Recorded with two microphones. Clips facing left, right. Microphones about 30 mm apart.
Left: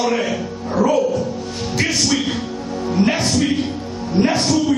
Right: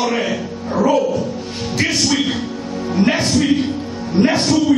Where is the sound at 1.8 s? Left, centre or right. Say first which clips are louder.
Right 2 dB; centre.